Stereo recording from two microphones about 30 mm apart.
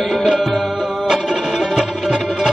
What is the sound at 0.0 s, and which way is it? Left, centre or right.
Music, centre.